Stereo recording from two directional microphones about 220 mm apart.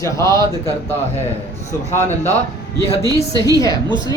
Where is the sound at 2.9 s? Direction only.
15° right (ahead or behind).